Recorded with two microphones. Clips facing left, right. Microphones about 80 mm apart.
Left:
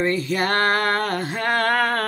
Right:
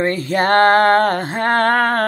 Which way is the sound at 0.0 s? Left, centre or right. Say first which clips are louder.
Right 4 dB; right.